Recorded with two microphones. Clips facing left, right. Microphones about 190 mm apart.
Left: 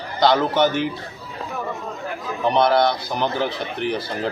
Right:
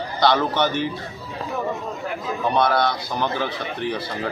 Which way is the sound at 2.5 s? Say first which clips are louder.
Left 3 dB; 20° left (ahead or behind).